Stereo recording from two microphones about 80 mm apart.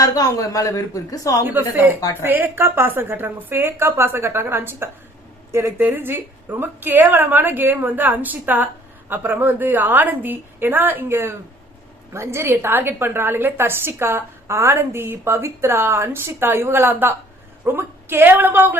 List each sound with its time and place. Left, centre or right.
0.0 s a woman's voice: left
1.7 s a woman's voice: right